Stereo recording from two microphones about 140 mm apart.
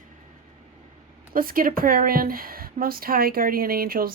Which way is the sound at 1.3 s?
90° right.